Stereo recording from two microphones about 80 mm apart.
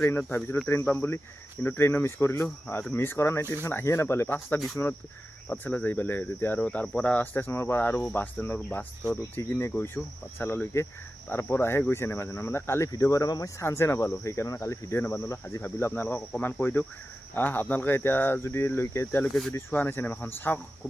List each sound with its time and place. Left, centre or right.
0.0 s speech: left
6.6 s cricket: centre
7.3 s speech: left
12.9 s speech: left